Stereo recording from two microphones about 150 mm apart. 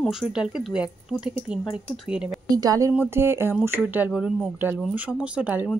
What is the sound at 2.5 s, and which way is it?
Speech, 25° right (ahead or behind).